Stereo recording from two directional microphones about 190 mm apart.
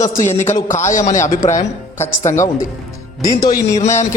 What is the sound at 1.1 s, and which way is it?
Speech, 15° left (ahead or behind).